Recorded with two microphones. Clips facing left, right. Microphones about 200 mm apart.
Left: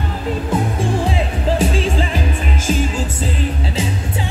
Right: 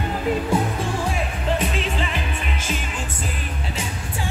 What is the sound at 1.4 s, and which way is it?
Music, 35° left (ahead or behind).